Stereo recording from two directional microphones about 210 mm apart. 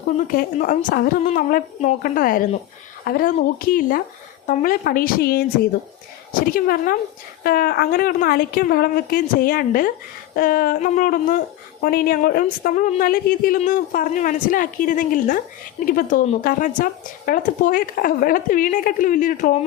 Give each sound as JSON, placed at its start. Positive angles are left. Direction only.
{"t": 0.3, "sound": "a woman's voice", "side_deg": 40}